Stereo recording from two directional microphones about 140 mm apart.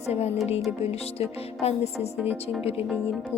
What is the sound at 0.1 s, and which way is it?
Speech, 50° left (ahead or behind).